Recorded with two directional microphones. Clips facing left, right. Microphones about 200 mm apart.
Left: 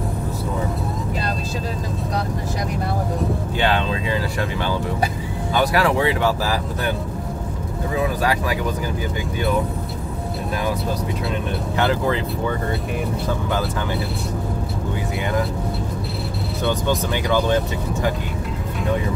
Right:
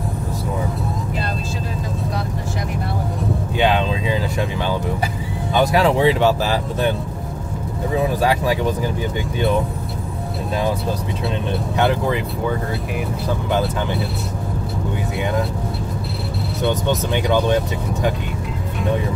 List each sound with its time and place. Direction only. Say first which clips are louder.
3.5 s a sound: right 4 dB; 15° right (ahead or behind)
5.5 s speech: right 3 dB; 20° right (ahead or behind)
8.2 s speech: right 3 dB; 25° right (ahead or behind)
11.7 s speech: right 1 dB; 15° right (ahead or behind)
17.1 s speech: right 3 dB; 20° right (ahead or behind)